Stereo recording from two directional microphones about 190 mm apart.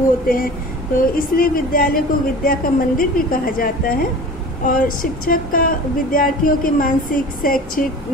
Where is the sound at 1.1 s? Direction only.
45° left (ahead or behind).